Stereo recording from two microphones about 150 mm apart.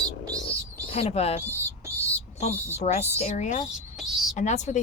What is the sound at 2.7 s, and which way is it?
Speech, 50° left (ahead or behind).